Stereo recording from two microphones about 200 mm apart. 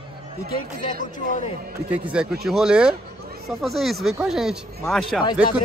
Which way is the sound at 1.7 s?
5° right (ahead or behind).